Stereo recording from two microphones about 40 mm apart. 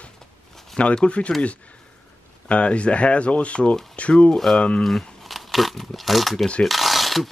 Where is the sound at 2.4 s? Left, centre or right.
Left.